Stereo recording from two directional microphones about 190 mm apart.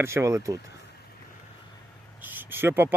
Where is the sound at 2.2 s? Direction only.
10° right (ahead or behind).